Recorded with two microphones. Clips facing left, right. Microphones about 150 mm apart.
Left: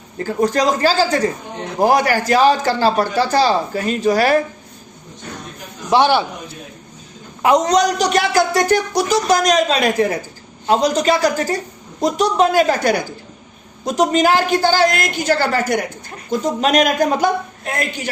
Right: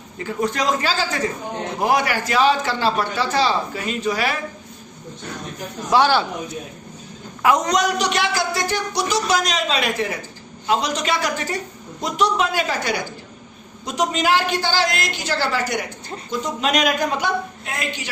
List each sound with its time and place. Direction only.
0.2 s a man's voice: 35° left (ahead or behind)
5.9 s a man's voice: 20° left (ahead or behind)
7.4 s a man's voice: 30° left (ahead or behind); by 18.1 s 45° left (ahead or behind)